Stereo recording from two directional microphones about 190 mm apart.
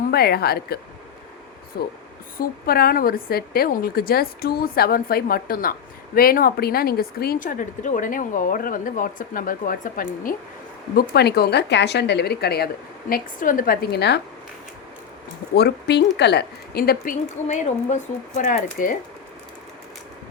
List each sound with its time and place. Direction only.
0.0 s speech: 55° left (ahead or behind)
2.4 s speech: 50° left (ahead or behind)
11.1 s a woman's voice: 60° left (ahead or behind)
15.5 s speech: 60° left (ahead or behind); by 18.9 s 45° left (ahead or behind)